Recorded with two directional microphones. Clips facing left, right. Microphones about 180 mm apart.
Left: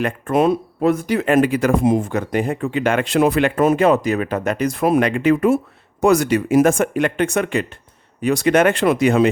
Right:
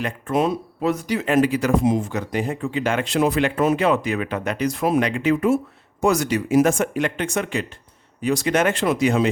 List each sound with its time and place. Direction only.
0.0 s speech: 55° left (ahead or behind)